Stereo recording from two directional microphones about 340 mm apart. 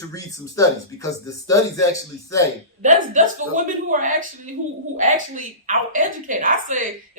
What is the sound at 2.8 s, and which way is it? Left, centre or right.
A woman's voice, right.